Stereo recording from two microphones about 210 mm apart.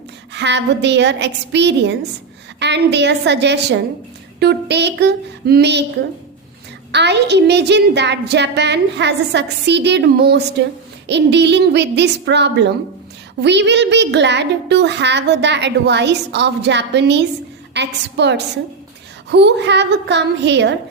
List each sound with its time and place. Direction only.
0.3 s a child's voice: 55° right (ahead or behind)
6.9 s a woman's voice: 55° right (ahead or behind)